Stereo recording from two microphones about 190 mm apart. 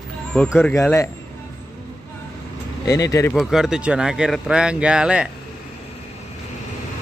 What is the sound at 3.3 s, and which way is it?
Speech, centre (ahead or behind).